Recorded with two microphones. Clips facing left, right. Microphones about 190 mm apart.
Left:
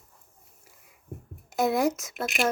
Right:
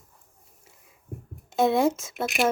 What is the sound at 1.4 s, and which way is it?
Speech, 25° right (ahead or behind).